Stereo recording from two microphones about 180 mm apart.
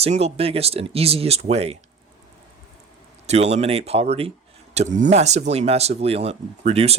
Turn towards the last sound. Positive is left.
turn(degrees=-35)  # may be behind; listen again after turning